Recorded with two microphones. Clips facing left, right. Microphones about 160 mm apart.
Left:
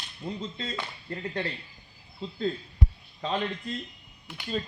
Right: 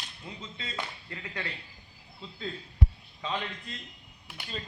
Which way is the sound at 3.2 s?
40° left (ahead or behind).